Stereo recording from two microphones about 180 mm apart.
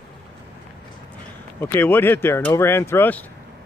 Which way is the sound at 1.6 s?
10° left (ahead or behind).